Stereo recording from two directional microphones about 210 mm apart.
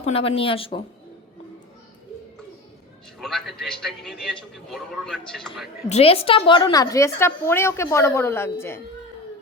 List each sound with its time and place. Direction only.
0.0 s speech: 25° left (ahead or behind)
3.2 s a man's voice: centre (ahead or behind)
5.9 s a woman's voice: 30° left (ahead or behind); by 8.8 s 10° left (ahead or behind)